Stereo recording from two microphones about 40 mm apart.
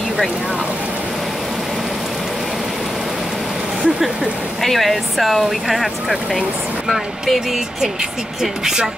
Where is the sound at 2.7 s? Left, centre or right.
Centre.